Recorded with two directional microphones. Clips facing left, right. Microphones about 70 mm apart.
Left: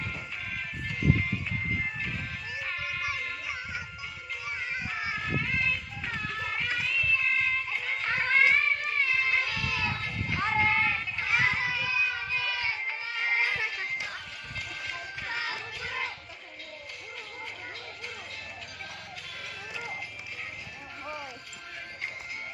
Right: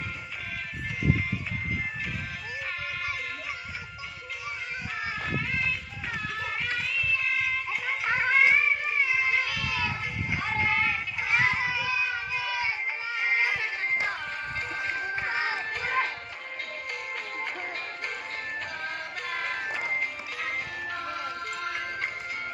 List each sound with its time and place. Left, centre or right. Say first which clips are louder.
4.9 s child singing: right 2 dB; centre
6.3 s music: even; centre
10.3 s child singing: left 1 dB; centre
13.1 s music: right 2 dB; centre
13.8 s music: right 7 dB; right
15.6 s music: right 7 dB; right
17.4 s music: right 6 dB; right
20.4 s music: right 9 dB; right